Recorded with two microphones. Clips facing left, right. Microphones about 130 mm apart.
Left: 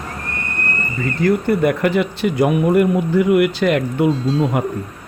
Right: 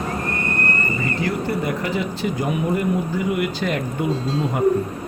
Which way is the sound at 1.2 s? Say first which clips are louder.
Left 10 dB; 60° left (ahead or behind).